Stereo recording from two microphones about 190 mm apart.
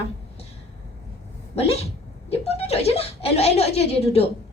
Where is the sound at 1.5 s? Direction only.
30° left (ahead or behind).